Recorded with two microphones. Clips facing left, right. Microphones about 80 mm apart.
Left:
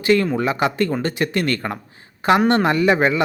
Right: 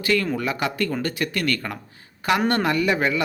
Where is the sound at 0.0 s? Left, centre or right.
Left.